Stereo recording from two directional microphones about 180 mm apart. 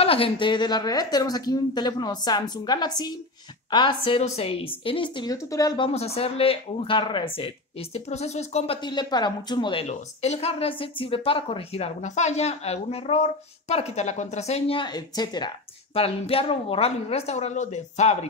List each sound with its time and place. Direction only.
0.0 s a woman's voice: 30° left (ahead or behind)
5.9 s a woman's voice: 35° left (ahead or behind)
8.8 s a woman's voice: 25° left (ahead or behind); by 18.1 s 40° left (ahead or behind)